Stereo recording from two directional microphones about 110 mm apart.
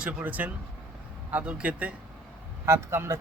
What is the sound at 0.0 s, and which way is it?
A man's voice, 10° right (ahead or behind).